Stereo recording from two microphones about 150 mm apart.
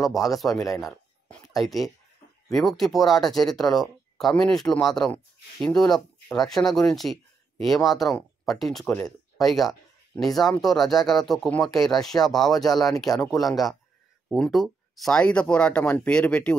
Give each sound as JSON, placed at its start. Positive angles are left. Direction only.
{"t": 0.0, "sound": "speech", "side_deg": 0}
{"t": 0.7, "sound": "a sound", "side_deg": 0}
{"t": 1.5, "sound": "speech", "side_deg": 0}
{"t": 8.8, "sound": "speech", "side_deg": 15}
{"t": 9.4, "sound": "speech", "side_deg": 0}